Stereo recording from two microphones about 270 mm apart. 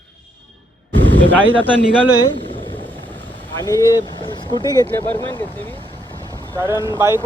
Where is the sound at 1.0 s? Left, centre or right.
Right.